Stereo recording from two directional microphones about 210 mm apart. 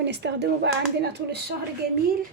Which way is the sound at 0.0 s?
55° right (ahead or behind).